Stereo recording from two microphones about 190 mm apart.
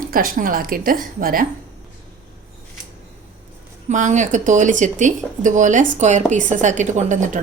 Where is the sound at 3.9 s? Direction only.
40° right (ahead or behind).